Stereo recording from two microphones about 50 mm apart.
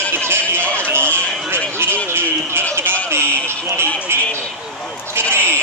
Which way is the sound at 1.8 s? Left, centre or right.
Right.